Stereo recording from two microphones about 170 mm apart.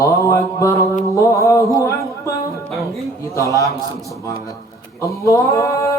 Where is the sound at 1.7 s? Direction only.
20° left (ahead or behind).